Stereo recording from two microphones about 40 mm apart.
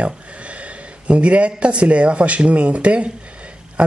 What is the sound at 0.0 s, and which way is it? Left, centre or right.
Speech, right.